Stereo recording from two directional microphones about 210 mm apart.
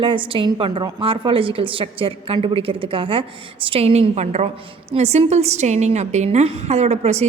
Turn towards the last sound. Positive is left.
turn(degrees=-30)  # may be behind; listen again after turning